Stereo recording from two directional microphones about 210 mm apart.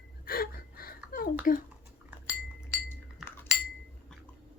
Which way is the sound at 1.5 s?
40° left (ahead or behind).